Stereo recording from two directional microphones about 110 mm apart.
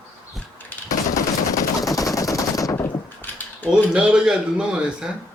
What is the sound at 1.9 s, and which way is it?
Machine gun, 30° left (ahead or behind).